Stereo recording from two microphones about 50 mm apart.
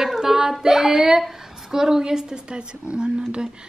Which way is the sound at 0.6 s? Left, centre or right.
Centre.